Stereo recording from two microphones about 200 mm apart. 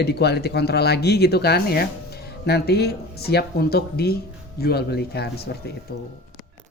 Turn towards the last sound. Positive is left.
turn(degrees=55)  # may be behind; listen again after turning